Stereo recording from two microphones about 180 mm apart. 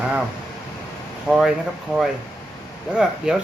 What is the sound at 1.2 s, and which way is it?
Speech, centre (ahead or behind).